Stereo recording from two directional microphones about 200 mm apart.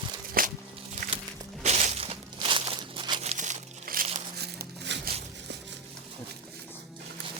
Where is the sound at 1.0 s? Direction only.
55° right (ahead or behind).